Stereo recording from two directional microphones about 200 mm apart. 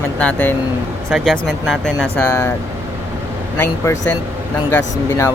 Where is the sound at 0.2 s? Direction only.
10° left (ahead or behind).